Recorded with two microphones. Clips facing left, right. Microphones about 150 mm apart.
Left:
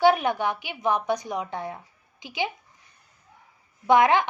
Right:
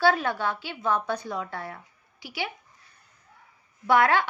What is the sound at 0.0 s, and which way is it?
A woman's voice, 20° left (ahead or behind).